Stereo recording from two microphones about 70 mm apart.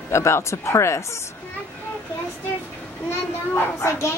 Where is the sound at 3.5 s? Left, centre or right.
Left.